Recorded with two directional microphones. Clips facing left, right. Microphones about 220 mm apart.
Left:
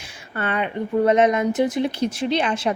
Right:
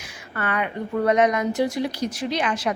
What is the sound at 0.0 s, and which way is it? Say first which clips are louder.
A woman's voice: left 2 dB; 25° left (ahead or behind).